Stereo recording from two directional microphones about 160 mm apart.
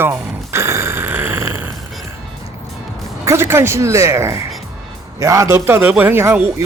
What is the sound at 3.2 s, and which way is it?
A man's voice, 15° right (ahead or behind).